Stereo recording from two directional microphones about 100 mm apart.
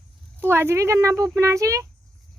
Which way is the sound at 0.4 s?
25° right (ahead or behind).